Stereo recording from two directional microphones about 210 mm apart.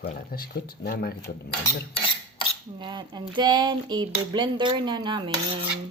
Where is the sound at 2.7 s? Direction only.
20° right (ahead or behind).